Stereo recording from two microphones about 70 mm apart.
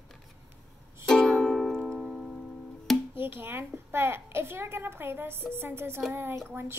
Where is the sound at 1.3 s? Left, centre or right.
Centre.